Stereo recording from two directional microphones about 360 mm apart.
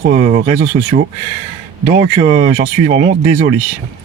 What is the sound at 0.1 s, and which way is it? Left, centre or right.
Speech, right.